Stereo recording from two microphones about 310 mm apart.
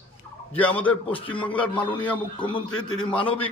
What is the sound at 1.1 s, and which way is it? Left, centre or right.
Speech, centre.